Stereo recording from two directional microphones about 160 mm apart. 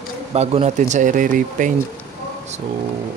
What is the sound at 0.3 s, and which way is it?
Speech, 40° right (ahead or behind).